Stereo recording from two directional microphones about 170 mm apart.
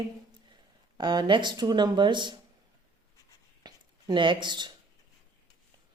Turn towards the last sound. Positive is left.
turn(degrees=-25)  # may be behind; listen again after turning